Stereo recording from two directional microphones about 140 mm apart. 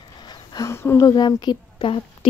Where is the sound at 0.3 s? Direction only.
30° left (ahead or behind).